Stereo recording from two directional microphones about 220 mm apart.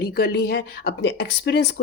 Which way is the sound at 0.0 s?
45° left (ahead or behind).